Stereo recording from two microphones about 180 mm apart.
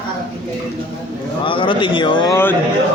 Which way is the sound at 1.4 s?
30° left (ahead or behind).